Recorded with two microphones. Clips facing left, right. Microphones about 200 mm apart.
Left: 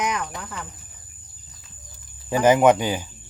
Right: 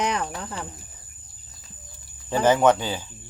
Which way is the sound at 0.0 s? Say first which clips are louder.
Right 1 dB; 30° right (ahead or behind).